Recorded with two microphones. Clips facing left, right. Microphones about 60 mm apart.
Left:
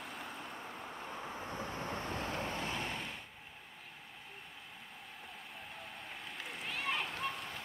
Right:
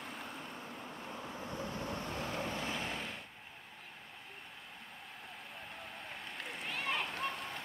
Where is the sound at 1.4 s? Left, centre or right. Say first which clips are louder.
Right 1 dB; left.